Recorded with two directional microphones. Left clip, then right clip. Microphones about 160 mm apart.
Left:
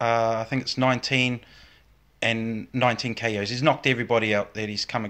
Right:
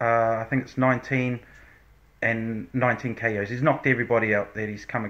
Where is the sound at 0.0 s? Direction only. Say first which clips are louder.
Right 1 dB; 40° left (ahead or behind).